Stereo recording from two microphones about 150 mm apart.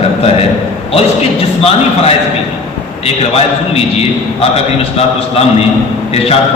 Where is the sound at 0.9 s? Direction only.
40° left (ahead or behind).